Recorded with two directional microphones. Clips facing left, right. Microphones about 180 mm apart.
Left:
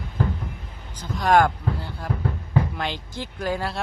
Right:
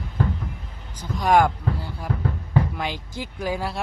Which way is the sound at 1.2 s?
10° right (ahead or behind).